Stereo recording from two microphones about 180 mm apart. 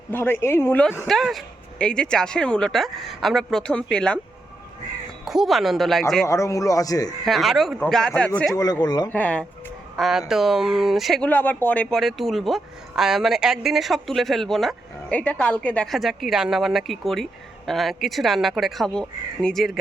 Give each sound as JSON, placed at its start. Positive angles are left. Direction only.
{"t": 0.1, "sound": "a man's voice", "side_deg": 10}
{"t": 1.0, "sound": "speech", "side_deg": 0}
{"t": 5.2, "sound": "speech", "side_deg": 0}
{"t": 6.2, "sound": "a man's voice", "side_deg": 15}
{"t": 7.3, "sound": "speech", "side_deg": 0}
{"t": 8.5, "sound": "speech", "side_deg": 20}
{"t": 9.0, "sound": "a man's voice", "side_deg": 10}